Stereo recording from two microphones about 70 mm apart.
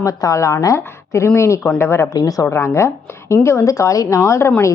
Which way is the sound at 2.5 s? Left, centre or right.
Left.